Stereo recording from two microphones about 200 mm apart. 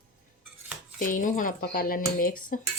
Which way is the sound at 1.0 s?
40° left (ahead or behind).